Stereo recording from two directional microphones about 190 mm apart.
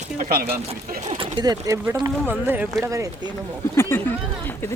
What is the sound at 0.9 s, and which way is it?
Speech, 45° right (ahead or behind).